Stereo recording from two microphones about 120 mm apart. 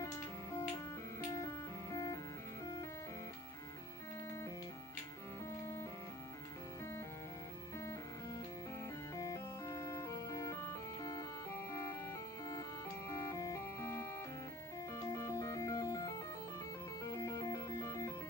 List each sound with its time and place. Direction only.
0.0 s music: 25° left (ahead or behind)
5.5 s music: 25° left (ahead or behind)
7.8 s music: 25° left (ahead or behind)